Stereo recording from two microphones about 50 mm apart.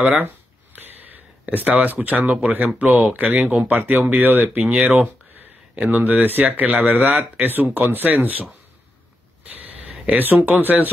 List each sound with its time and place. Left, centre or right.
0.0 s speech: right
0.7 s a sound: right
1.9 s speech: right
3.3 s speech: centre
3.6 s speech: right
10.0 s speech: right